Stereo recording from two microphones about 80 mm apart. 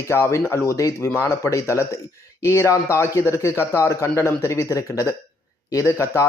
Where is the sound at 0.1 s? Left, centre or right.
Left.